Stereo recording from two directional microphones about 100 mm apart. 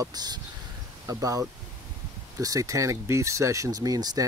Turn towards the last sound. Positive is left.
turn(degrees=-40)  # may be behind; listen again after turning